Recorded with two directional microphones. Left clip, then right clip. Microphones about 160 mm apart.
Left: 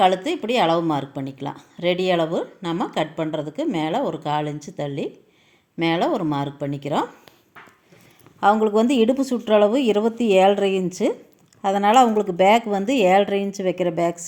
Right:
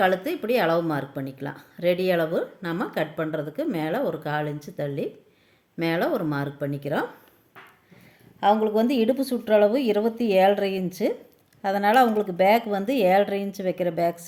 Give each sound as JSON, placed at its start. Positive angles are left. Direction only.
{"t": 0.0, "sound": "speech", "side_deg": 15}
{"t": 8.4, "sound": "a woman's voice", "side_deg": 20}